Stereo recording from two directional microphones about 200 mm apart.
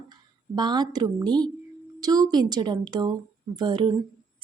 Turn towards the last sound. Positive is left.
turn(degrees=-20)  # may be behind; listen again after turning